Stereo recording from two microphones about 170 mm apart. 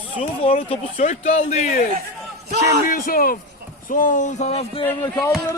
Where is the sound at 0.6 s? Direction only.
40° left (ahead or behind).